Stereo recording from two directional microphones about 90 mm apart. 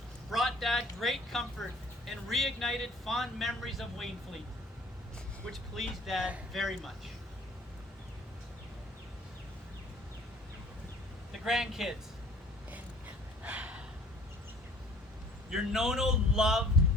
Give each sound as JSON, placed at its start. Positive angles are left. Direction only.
{"t": 0.3, "sound": "a sound", "side_deg": 0}
{"t": 2.0, "sound": "speech", "side_deg": 0}
{"t": 5.5, "sound": "speech", "side_deg": 0}
{"t": 11.3, "sound": "a man's voice", "side_deg": -5}
{"t": 13.4, "sound": "gasp", "side_deg": -15}
{"t": 15.4, "sound": "speech", "side_deg": -5}